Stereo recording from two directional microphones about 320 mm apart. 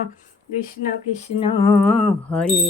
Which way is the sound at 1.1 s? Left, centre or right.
Centre.